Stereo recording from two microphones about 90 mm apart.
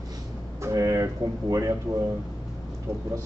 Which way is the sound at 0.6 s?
40° right (ahead or behind).